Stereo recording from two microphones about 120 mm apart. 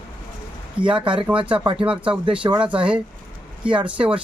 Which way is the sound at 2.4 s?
35° right (ahead or behind).